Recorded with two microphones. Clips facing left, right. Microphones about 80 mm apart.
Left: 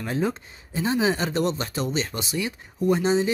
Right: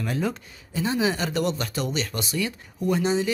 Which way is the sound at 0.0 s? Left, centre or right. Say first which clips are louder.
Left 1 dB; left.